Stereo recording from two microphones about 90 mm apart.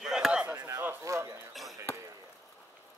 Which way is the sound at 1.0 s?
35° right (ahead or behind).